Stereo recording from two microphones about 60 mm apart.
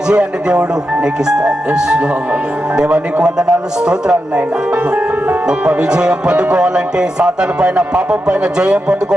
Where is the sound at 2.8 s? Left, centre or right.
Right.